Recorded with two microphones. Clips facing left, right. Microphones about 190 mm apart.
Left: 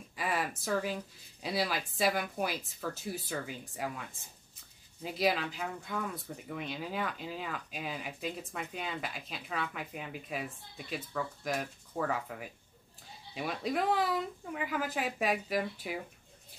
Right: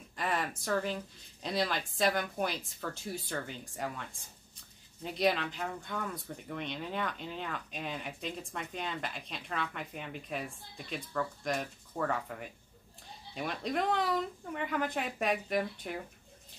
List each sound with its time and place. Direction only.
0.1 s speech: 5° left (ahead or behind)